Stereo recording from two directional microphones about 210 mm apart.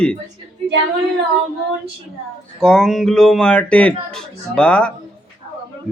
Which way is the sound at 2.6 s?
5° left (ahead or behind).